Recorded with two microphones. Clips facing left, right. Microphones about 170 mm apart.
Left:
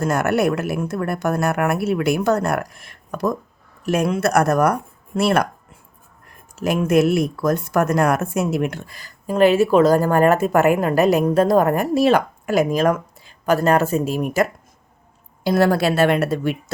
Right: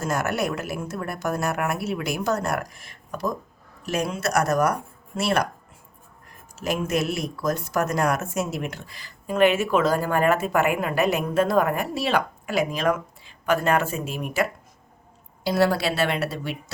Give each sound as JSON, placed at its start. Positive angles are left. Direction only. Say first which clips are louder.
{"t": 0.0, "sound": "speech", "louder": "left 7 dB", "side_deg": 55}
{"t": 6.6, "sound": "speech", "louder": "left 8 dB", "side_deg": 55}
{"t": 15.4, "sound": "speech", "louder": "left 5 dB", "side_deg": 50}